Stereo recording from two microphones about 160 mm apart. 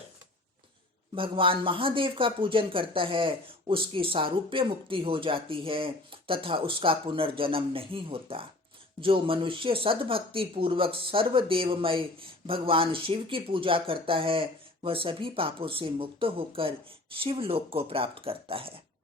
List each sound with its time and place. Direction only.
1.1 s speech: 35° right (ahead or behind)